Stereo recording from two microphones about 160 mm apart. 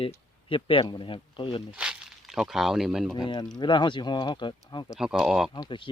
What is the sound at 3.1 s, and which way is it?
Speech, 25° left (ahead or behind).